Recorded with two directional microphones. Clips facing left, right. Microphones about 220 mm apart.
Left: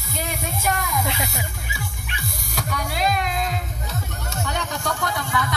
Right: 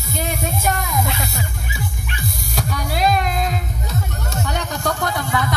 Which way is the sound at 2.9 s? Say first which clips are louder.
Right 5 dB; 40° right (ahead or behind).